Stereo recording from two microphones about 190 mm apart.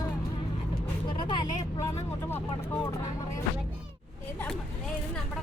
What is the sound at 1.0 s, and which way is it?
Vehicle, 25° left (ahead or behind).